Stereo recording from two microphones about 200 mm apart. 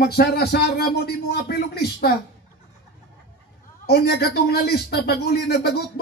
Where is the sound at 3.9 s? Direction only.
55° left (ahead or behind).